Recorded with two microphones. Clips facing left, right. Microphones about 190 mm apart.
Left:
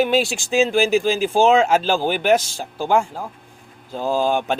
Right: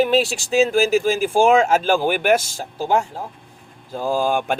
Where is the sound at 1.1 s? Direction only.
50° right (ahead or behind).